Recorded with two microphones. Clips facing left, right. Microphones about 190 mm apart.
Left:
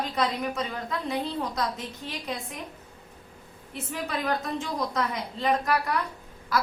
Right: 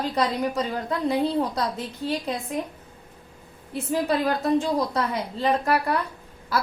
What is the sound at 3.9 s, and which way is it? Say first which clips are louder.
A woman's voice: right 6 dB; 30° right (ahead or behind).